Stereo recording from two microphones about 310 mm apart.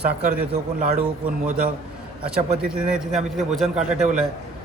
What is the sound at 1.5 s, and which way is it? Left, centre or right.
Speech, right.